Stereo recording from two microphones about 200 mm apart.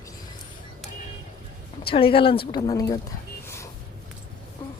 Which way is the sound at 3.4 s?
15° left (ahead or behind).